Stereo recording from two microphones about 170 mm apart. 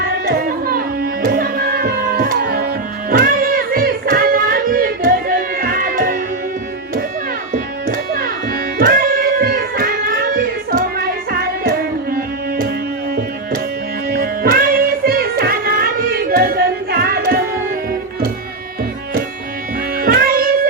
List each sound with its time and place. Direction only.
0.3 s music: 60° right (ahead or behind)
7.5 s music: 55° right (ahead or behind)
8.8 s a sound: 60° right (ahead or behind)
12.1 s music: 65° right (ahead or behind)
14.1 s music: 60° right (ahead or behind)
20.0 s music: 60° right (ahead or behind)